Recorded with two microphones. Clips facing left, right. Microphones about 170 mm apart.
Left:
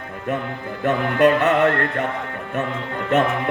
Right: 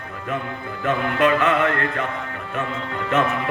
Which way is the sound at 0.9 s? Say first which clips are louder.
Left 3 dB; 45° left (ahead or behind).